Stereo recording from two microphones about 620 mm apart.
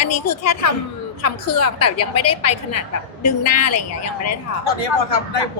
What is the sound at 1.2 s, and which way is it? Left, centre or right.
A woman's voice, left.